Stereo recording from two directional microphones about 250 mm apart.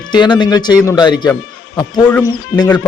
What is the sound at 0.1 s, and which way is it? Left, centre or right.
Speech, centre.